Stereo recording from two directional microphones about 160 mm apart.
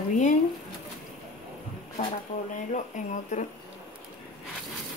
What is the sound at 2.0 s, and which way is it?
Speech, 50° left (ahead or behind).